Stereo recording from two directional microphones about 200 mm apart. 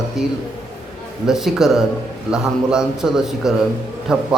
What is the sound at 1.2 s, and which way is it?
A man's voice, centre (ahead or behind).